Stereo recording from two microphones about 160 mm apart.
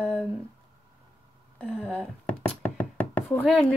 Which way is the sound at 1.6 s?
10° left (ahead or behind).